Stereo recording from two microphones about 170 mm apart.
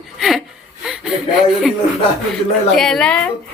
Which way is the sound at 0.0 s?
Centre (ahead or behind).